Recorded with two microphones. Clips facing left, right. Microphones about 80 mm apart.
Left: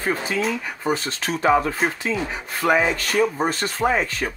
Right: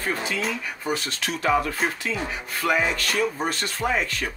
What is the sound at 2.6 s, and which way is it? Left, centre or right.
Speech, left.